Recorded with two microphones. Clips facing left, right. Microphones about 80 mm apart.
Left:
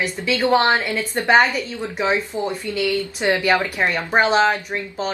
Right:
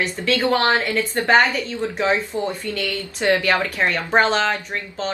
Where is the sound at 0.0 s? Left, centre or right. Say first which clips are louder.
Even; centre.